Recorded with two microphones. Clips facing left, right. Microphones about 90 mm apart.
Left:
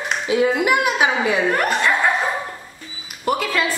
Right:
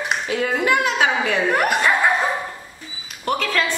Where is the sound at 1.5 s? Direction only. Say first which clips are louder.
Right 1 dB; 5° right (ahead or behind).